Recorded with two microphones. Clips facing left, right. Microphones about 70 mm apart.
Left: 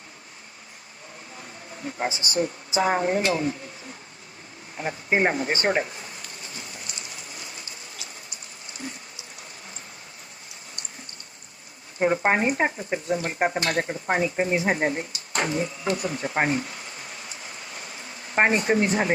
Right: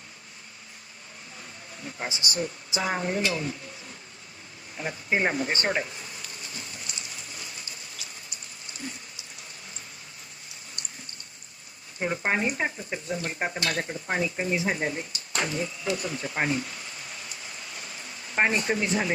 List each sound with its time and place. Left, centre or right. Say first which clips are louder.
1.4 s speech: left 4 dB; left
4.8 s speech: left 4 dB; left
11.9 s speech: left 6 dB; left
14.5 s speech: left 4 dB; left
18.3 s speech: left 4 dB; left